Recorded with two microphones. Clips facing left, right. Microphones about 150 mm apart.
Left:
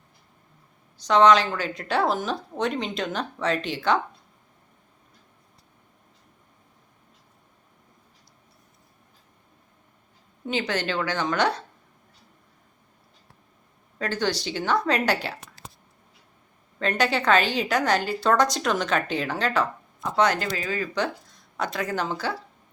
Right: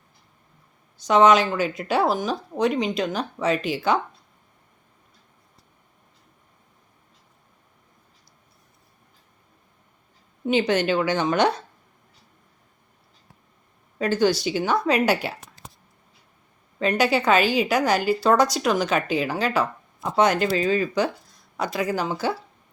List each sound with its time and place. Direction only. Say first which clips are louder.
1.0 s a woman's voice: right 1 dB; 10° right (ahead or behind)
10.4 s a woman's voice: right 6 dB; 15° right (ahead or behind)
14.0 s a woman's voice: right 6 dB; 10° right (ahead or behind)
16.9 s a woman's voice: right 2 dB; 10° right (ahead or behind)
20.0 s a woman's voice: right 3 dB; 20° right (ahead or behind)
21.6 s a woman's voice: right 3 dB; 5° right (ahead or behind)